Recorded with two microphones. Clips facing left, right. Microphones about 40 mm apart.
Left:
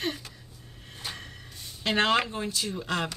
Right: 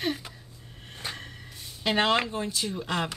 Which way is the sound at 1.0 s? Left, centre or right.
Right.